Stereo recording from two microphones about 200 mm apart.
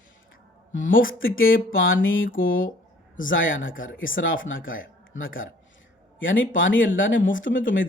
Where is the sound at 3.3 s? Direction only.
75° left (ahead or behind).